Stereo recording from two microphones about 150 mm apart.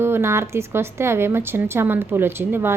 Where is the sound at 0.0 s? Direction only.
15° right (ahead or behind).